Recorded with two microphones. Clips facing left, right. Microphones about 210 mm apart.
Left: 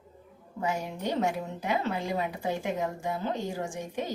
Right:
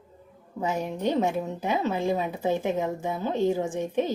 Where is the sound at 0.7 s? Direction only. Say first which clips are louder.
Right 6 dB; 20° right (ahead or behind).